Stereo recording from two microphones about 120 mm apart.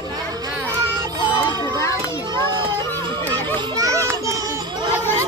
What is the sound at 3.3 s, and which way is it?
Children playing, 30° right (ahead or behind).